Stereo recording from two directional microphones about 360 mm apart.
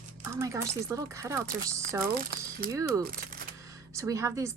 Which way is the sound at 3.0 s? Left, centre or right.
Right.